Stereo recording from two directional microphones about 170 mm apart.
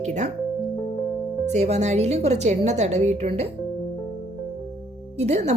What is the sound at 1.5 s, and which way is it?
A woman's voice, 40° right (ahead or behind).